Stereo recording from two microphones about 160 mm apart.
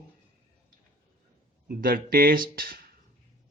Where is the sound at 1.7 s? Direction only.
65° right (ahead or behind).